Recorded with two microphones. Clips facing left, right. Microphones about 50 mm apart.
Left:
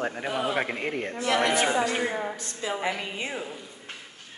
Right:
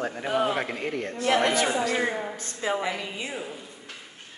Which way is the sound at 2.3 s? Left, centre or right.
Right.